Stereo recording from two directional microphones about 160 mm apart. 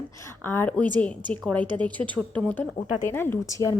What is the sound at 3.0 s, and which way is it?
Speech, 15° left (ahead or behind).